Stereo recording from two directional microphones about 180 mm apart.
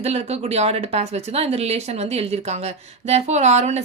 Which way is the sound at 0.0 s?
35° right (ahead or behind).